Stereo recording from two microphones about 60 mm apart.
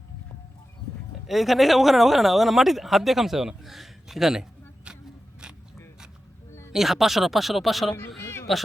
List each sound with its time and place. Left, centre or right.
1.3 s speech: centre
6.7 s speech: centre
8.2 s a sound: left